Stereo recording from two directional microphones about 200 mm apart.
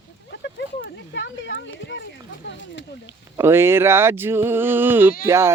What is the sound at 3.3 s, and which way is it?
Speech, 10° right (ahead or behind).